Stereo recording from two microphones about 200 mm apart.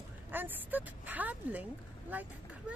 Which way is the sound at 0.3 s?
10° right (ahead or behind).